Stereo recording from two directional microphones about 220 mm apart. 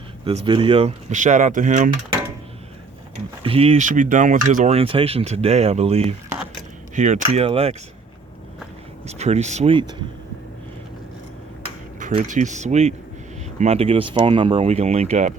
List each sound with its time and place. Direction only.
0.3 s speech: 25° right (ahead or behind)
3.4 s speech: 25° right (ahead or behind)
9.0 s speech: 30° right (ahead or behind)
11.9 s speech: 35° right (ahead or behind)